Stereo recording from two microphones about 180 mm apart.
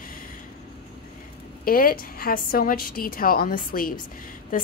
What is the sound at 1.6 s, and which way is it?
A woman's voice, 55° left (ahead or behind).